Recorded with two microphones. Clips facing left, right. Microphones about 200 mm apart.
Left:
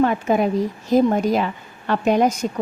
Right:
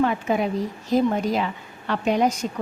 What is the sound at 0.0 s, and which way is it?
A woman's voice, 45° left (ahead or behind).